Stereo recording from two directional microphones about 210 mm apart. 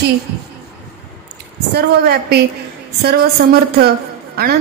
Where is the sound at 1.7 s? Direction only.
50° right (ahead or behind).